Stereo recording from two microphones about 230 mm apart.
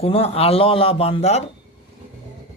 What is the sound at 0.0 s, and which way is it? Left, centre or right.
A man's voice, left.